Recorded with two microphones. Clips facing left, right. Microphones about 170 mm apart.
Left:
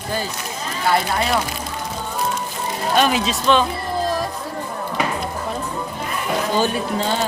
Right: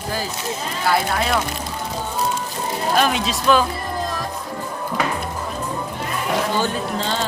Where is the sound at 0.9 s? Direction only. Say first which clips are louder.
Left 1 dB; centre (ahead or behind).